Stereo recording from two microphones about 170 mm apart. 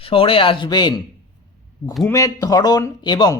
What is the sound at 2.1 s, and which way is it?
Speech, 20° left (ahead or behind).